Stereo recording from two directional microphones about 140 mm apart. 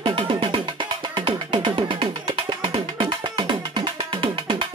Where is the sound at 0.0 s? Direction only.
35° right (ahead or behind).